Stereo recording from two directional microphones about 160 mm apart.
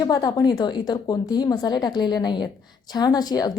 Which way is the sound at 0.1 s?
25° left (ahead or behind).